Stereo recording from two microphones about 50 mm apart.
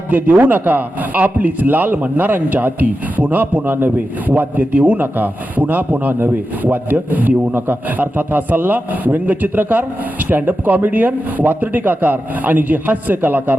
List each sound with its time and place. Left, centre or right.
0.1 s a man's voice: right